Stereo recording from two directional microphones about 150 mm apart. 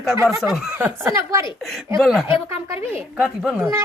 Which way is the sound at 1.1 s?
20° right (ahead or behind).